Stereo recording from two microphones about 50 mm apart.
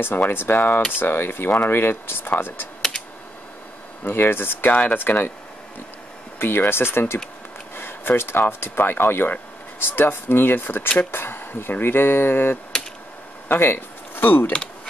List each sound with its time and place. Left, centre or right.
0.0 s speech: left
4.0 s speech: left
6.4 s speech: left